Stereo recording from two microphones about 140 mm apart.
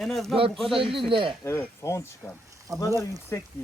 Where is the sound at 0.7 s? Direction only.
40° right (ahead or behind).